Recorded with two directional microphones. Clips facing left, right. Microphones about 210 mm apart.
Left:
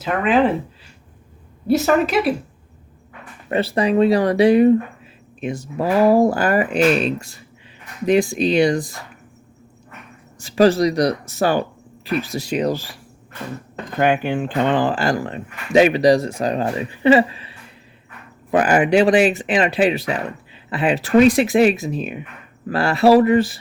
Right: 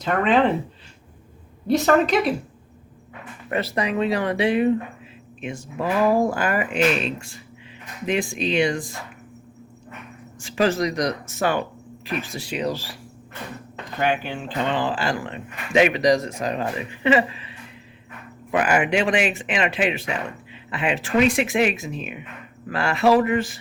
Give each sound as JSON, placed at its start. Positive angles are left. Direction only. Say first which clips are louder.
{"t": 0.0, "sound": "a woman's voice", "louder": "left 2 dB", "side_deg": 5}
{"t": 1.6, "sound": "a woman's voice", "louder": "left 2 dB", "side_deg": 5}
{"t": 3.5, "sound": "speech", "louder": "left 6 dB", "side_deg": 30}
{"t": 10.4, "sound": "speech", "louder": "left 7 dB", "side_deg": 35}
{"t": 14.0, "sound": "speech", "louder": "left 6 dB", "side_deg": 50}
{"t": 18.5, "sound": "speech", "louder": "left 5 dB", "side_deg": 35}